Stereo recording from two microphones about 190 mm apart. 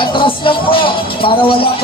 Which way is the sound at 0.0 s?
25° left (ahead or behind).